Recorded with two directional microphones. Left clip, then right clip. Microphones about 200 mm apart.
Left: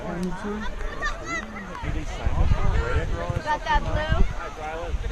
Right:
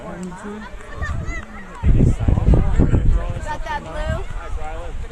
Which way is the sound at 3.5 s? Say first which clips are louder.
Left 3 dB; 30° right (ahead or behind).